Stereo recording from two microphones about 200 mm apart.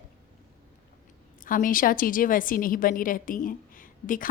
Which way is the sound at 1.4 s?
45° left (ahead or behind).